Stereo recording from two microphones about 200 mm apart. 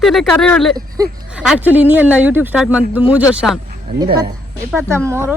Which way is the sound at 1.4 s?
5° right (ahead or behind).